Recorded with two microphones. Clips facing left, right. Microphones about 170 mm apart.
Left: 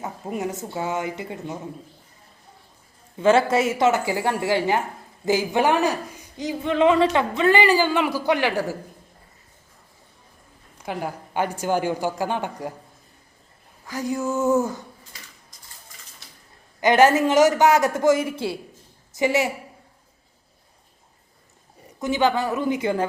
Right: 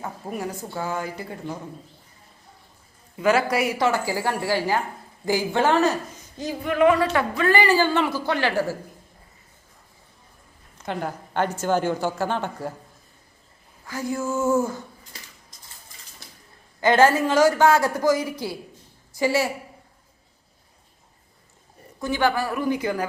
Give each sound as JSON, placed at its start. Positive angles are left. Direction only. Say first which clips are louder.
{"t": 0.0, "sound": "a man's voice", "louder": "left 2 dB", "side_deg": 20}
{"t": 3.2, "sound": "a man's voice", "louder": "left 3 dB", "side_deg": 25}
{"t": 10.8, "sound": "speech", "louder": "even", "side_deg": 10}
{"t": 13.8, "sound": "speech", "louder": "left 2 dB", "side_deg": 15}
{"t": 16.8, "sound": "a man's voice", "louder": "left 1 dB", "side_deg": 15}
{"t": 22.0, "sound": "a man's voice", "louder": "left 2 dB", "side_deg": 20}